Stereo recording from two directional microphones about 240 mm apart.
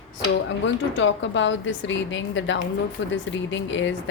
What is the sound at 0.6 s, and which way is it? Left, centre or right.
A woman's voice, left.